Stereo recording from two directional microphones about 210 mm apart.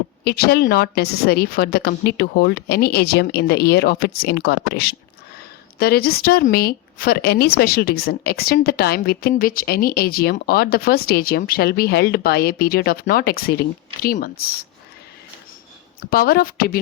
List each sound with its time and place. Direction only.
0.3 s speech: 45° left (ahead or behind)
16.0 s speech: 45° left (ahead or behind)